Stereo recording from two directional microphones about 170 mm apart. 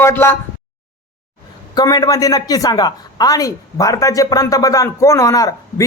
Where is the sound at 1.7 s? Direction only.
25° left (ahead or behind).